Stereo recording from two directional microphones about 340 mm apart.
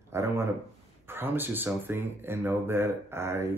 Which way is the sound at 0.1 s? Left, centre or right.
Centre.